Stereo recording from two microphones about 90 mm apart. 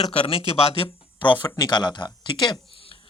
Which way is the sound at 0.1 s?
90° left.